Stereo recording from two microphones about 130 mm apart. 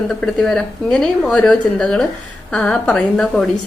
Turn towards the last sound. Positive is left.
turn(degrees=5)  # may be behind; listen again after turning